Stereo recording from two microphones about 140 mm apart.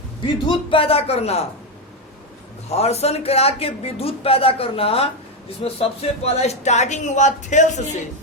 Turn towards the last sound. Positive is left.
turn(degrees=55)  # may be behind; listen again after turning